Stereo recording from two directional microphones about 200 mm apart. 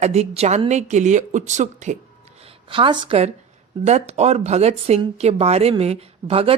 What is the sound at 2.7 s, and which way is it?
Speech, 25° right (ahead or behind).